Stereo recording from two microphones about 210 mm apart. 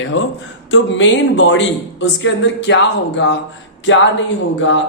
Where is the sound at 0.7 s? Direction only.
60° left (ahead or behind).